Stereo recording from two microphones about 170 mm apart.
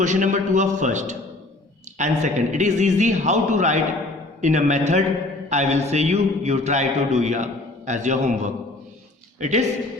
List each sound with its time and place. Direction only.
0.0 s speech: 45° right (ahead or behind)